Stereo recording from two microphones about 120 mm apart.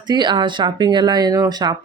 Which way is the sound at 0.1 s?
40° right (ahead or behind).